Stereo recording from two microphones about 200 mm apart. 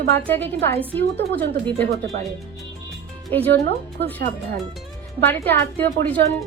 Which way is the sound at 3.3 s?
10° left (ahead or behind).